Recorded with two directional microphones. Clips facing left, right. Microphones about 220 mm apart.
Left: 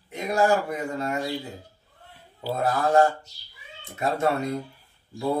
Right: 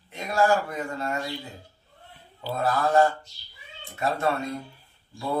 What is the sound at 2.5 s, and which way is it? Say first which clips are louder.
Mantra: left 1 dB; 20° left (ahead or behind).